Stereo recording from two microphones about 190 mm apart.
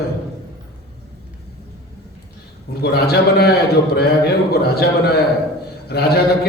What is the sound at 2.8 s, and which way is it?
A man's voice, 60° left (ahead or behind).